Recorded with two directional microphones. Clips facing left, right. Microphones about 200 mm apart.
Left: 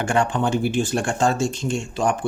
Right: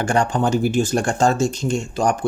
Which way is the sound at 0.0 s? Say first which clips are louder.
Right 2 dB; 40° right (ahead or behind).